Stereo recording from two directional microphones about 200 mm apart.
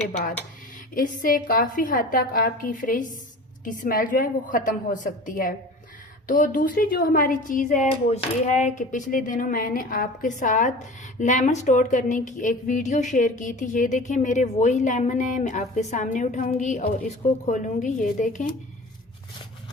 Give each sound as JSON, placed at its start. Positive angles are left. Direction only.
{"t": 0.9, "sound": "a woman's voice", "side_deg": 45}